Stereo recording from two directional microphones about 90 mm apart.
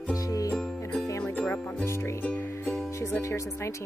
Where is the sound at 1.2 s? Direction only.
20° left (ahead or behind).